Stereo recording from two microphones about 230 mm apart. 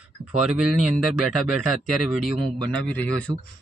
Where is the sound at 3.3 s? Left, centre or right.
Centre.